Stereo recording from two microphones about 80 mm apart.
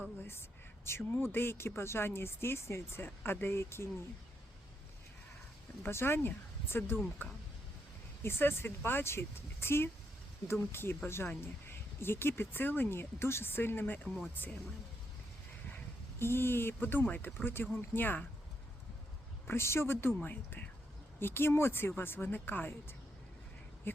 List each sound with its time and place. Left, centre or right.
0.2 s speech: left
5.8 s speech: left
8.2 s speech: left
16.1 s speech: left
19.5 s speech: left